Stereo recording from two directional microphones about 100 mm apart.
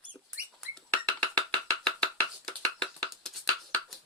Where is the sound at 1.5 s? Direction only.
10° left (ahead or behind).